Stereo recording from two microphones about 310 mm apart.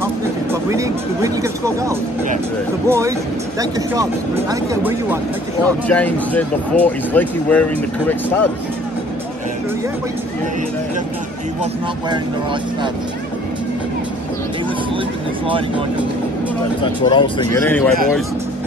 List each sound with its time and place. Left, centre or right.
0.0 s speech: centre
5.9 s speech: centre
16.8 s speech: centre